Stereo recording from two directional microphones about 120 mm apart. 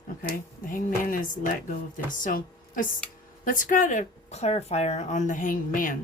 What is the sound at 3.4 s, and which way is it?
A woman's voice, 90° left.